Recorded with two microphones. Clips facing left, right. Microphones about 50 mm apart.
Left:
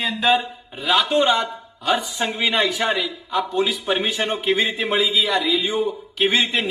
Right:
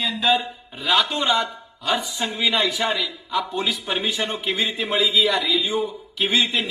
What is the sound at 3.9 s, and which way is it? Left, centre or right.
A man's voice, left.